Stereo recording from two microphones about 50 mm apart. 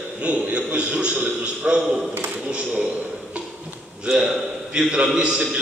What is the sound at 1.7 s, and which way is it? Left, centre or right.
Speech, centre.